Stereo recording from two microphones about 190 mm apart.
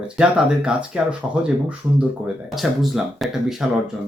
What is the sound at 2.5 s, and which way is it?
Speech, centre (ahead or behind).